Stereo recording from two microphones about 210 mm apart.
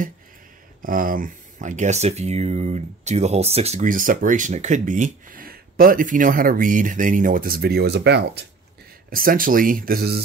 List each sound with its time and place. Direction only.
0.8 s speech: 40° right (ahead or behind)